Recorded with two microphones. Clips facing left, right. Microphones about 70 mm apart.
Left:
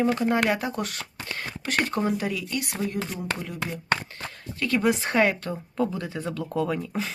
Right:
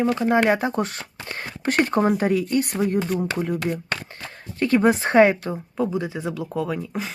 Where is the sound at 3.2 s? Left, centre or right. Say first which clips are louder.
Right 7 dB; right.